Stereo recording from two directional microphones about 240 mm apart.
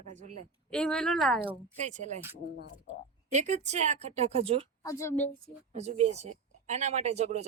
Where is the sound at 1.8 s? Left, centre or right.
Right.